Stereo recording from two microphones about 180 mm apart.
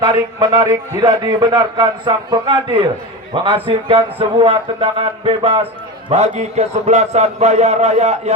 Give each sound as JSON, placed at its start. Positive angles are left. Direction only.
{"t": 0.0, "sound": "a man's voice", "side_deg": -25}